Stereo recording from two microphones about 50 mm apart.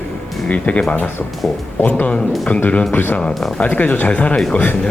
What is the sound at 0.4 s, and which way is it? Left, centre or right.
Speech, left.